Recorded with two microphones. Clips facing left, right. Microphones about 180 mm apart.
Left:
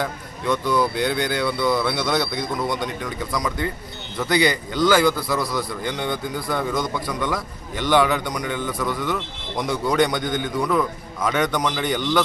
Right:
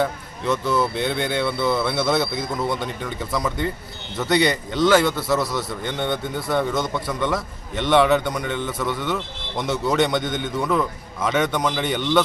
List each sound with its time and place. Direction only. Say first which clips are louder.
0.0 s speech: right 3 dB; centre (ahead or behind)
0.6 s speech: left 1 dB; 25° right (ahead or behind)
0.9 s a man's voice: even; centre (ahead or behind)